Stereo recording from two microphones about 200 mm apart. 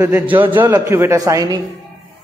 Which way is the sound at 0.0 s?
10° right (ahead or behind).